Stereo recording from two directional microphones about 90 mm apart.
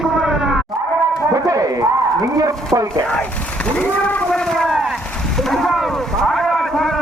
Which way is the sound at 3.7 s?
15° left (ahead or behind).